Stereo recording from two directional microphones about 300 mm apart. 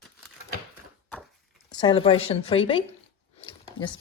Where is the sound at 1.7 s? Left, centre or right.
Centre.